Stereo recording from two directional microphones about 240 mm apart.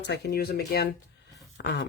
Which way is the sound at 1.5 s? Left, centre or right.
Left.